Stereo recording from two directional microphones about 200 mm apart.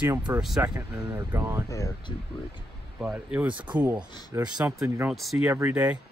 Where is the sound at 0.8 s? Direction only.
15° right (ahead or behind).